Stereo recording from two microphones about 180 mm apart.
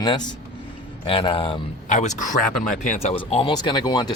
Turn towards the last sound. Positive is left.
turn(degrees=20)  # may be behind; listen again after turning